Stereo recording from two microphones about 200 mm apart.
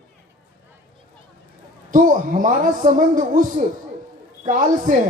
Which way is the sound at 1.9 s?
40° right (ahead or behind).